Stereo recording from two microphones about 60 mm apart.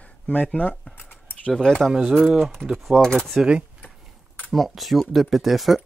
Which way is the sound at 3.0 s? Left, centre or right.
Centre.